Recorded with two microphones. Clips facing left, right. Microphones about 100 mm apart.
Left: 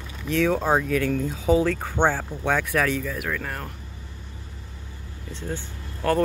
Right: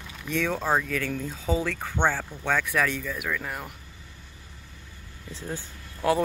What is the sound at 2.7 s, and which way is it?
Speech, 5° left (ahead or behind).